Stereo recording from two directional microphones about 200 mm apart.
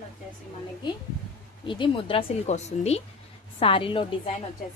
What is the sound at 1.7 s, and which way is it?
Speech, 25° left (ahead or behind).